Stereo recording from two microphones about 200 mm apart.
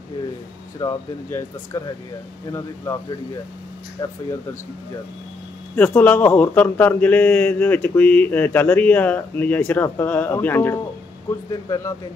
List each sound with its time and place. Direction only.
0.7 s speech: 15° left (ahead or behind)
5.8 s speech: 10° left (ahead or behind)